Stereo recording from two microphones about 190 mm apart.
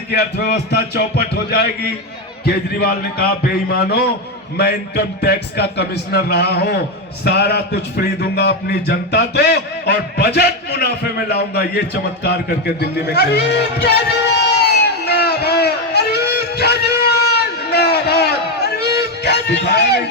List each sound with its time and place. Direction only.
0.1 s a man's voice: 55° left (ahead or behind)
14.6 s crowd: 60° left (ahead or behind)